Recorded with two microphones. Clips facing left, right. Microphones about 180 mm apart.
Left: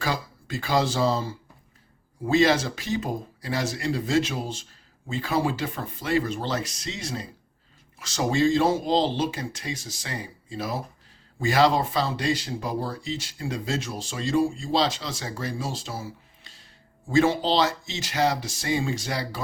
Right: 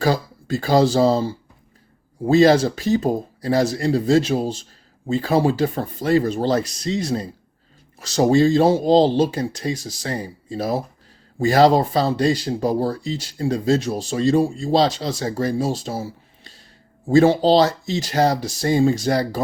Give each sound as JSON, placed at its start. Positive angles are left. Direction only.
{"t": 0.0, "sound": "speech", "side_deg": -35}